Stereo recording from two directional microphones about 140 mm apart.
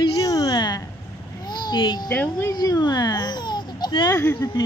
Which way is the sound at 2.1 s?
15° left (ahead or behind).